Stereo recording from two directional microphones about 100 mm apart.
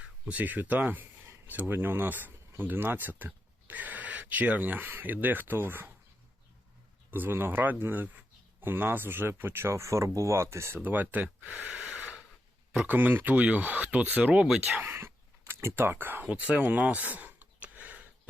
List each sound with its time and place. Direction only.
0.0 s speech: 15° right (ahead or behind)
7.1 s speech: 20° right (ahead or behind)
14.7 s a sound: 20° right (ahead or behind)